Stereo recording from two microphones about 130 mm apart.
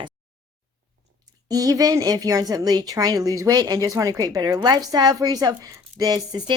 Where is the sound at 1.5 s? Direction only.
30° right (ahead or behind).